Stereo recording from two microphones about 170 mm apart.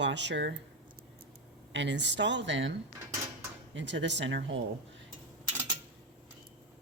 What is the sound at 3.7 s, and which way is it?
Speech, 90° right.